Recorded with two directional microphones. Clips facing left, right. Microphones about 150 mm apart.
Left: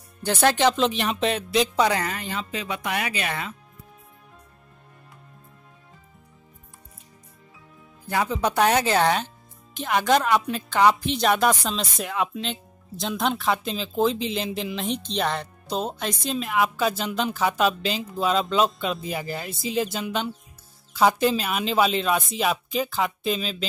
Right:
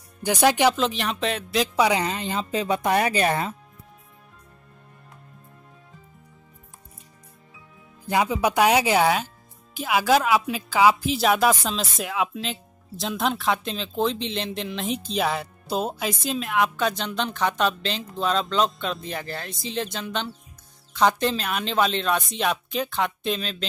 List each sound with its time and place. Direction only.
0.2 s speech: 15° right (ahead or behind)
0.7 s speech: centre (ahead or behind)
1.9 s speech: 20° right (ahead or behind)
2.5 s speech: 35° right (ahead or behind)
8.1 s speech: 15° right (ahead or behind); by 23.7 s 5° left (ahead or behind)